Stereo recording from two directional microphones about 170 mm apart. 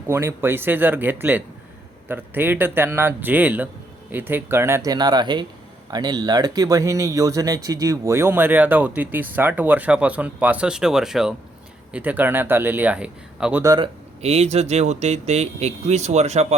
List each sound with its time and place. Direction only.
0.1 s speech: 15° right (ahead or behind)
13.6 s speech: 25° right (ahead or behind); by 16.6 s 40° right (ahead or behind)